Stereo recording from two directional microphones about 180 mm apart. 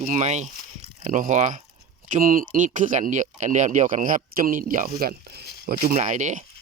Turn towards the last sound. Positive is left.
turn(degrees=-45)  # may be behind; listen again after turning